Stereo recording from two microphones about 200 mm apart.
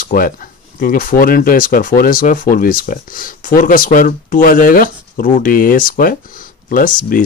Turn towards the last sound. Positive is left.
turn(degrees=45)  # may be behind; listen again after turning